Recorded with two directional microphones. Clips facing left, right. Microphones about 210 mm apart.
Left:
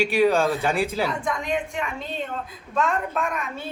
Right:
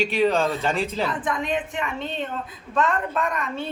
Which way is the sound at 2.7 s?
Centre (ahead or behind).